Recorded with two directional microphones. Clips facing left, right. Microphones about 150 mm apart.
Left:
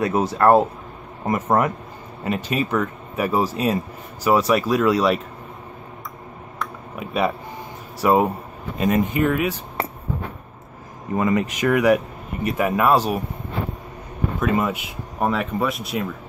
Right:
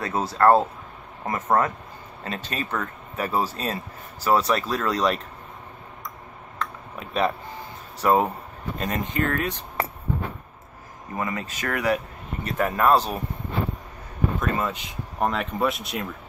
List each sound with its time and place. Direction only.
0.0 s speech: 15° left (ahead or behind)
6.6 s a sound: 10° left (ahead or behind)
8.0 s speech: 10° left (ahead or behind)
11.1 s speech: 20° left (ahead or behind)
14.4 s speech: 10° left (ahead or behind)